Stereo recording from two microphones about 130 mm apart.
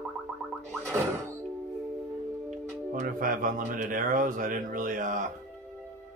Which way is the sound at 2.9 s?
85° right.